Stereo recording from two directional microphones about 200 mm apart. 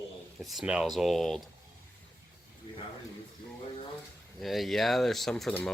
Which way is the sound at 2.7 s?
25° left (ahead or behind).